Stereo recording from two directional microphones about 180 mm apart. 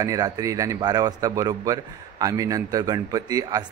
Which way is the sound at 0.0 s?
20° right (ahead or behind).